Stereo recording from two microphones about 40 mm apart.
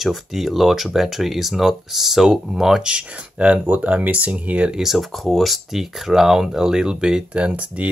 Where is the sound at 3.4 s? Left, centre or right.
Right.